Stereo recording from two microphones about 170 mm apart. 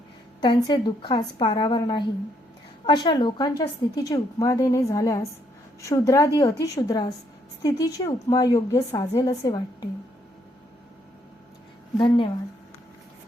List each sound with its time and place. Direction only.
0.4 s a woman's voice: 30° left (ahead or behind)
11.9 s speech: 30° left (ahead or behind)